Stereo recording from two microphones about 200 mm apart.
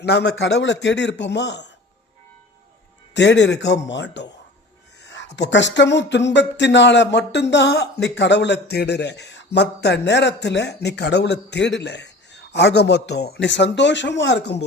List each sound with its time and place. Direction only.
0.0 s speech: 55° left (ahead or behind)
3.2 s speech: 60° left (ahead or behind)
5.0 s a sound: 65° left (ahead or behind)
5.4 s speech: 65° left (ahead or behind)